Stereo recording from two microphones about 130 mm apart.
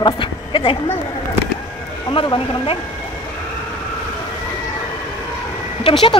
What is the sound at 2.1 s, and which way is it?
Speech, 40° left (ahead or behind).